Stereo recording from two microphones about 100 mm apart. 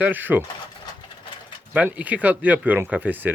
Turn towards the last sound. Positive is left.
turn(degrees=-15)  # may be behind; listen again after turning